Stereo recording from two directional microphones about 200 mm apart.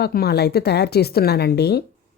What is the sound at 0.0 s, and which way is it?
Speech, 50° left (ahead or behind).